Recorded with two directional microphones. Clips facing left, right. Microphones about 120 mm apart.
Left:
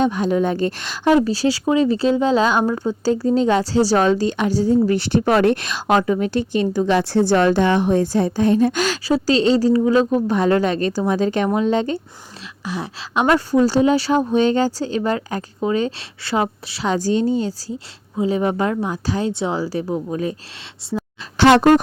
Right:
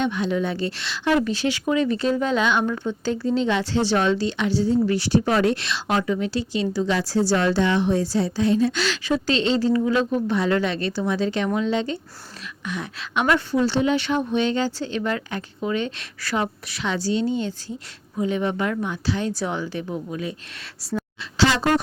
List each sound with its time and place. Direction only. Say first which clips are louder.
0.0 s speech: left 5 dB; 40° left (ahead or behind)
1.1 s speech: left 5 dB; 35° left (ahead or behind)
12.6 s a woman's voice: left 4 dB; 30° left (ahead or behind)
21.3 s speech: left 8 dB; 55° left (ahead or behind)